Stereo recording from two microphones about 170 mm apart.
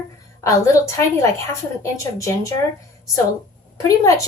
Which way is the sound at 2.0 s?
15° left (ahead or behind).